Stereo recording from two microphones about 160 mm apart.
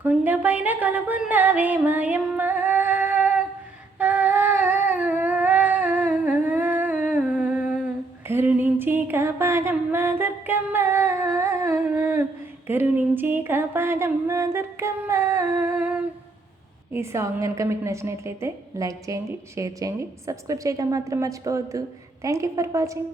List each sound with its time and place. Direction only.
0.0 s music: 10° right (ahead or behind)
3.9 s a sound: 10° right (ahead or behind)
16.9 s a woman's voice: 15° right (ahead or behind)